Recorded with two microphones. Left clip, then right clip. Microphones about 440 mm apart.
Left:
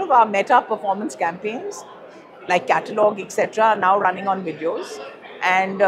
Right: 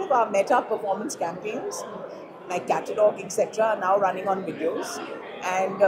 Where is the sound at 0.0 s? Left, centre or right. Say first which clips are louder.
Left 6 dB; left.